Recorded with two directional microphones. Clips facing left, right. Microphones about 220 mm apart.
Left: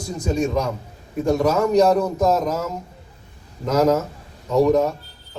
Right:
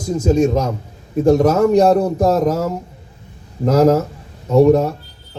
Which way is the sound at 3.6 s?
35° right (ahead or behind).